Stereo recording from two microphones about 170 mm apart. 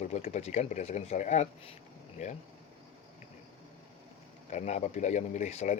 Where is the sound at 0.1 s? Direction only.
40° left (ahead or behind).